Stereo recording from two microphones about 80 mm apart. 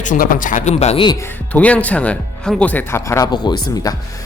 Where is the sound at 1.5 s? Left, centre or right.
Centre.